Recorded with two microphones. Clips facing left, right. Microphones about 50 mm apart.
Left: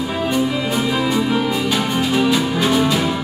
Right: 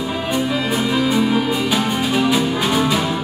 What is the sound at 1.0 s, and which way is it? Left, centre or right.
Music, centre.